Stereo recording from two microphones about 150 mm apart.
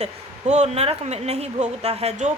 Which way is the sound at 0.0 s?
50° right (ahead or behind).